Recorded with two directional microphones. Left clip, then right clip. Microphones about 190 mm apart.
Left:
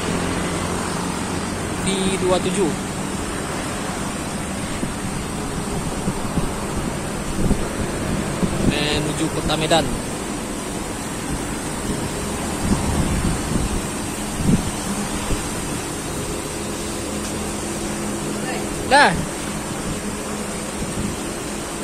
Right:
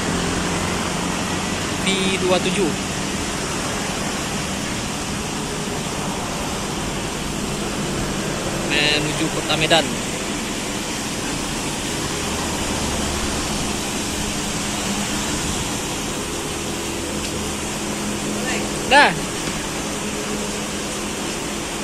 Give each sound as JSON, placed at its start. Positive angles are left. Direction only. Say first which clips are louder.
{"t": 8.7, "sound": "vehicle", "louder": "right 6 dB", "side_deg": 15}
{"t": 9.5, "sound": "speech", "louder": "right 2 dB", "side_deg": 15}
{"t": 18.9, "sound": "speech", "louder": "right 1 dB", "side_deg": 25}